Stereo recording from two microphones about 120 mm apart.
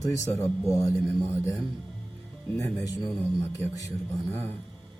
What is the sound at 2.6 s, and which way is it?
Speech, 25° left (ahead or behind).